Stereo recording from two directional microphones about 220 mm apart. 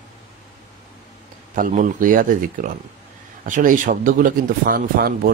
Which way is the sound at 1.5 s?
35° right (ahead or behind).